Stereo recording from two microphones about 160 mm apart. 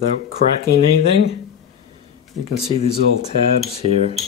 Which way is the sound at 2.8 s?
40° left (ahead or behind).